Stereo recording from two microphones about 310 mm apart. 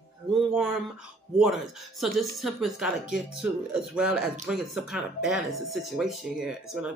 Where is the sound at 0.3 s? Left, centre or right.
Centre.